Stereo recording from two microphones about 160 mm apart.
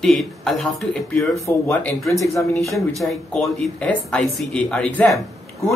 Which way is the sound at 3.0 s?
5° left (ahead or behind).